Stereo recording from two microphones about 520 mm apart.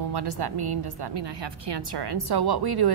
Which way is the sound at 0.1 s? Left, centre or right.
Right.